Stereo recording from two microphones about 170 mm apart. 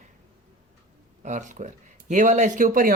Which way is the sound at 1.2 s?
45° right (ahead or behind).